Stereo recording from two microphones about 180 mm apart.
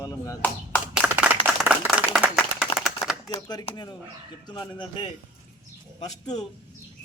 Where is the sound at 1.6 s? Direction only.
10° right (ahead or behind).